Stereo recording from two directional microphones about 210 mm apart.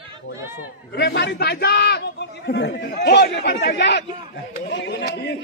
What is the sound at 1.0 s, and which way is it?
A man's voice, 55° left (ahead or behind).